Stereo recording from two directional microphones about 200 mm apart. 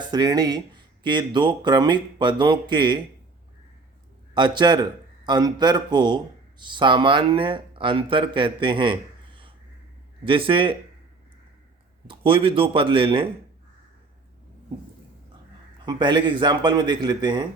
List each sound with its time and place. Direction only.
0.1 s speech: 20° right (ahead or behind)
4.4 s a man's voice: 20° right (ahead or behind)
12.0 s speech: 25° right (ahead or behind)
15.9 s speech: 20° right (ahead or behind)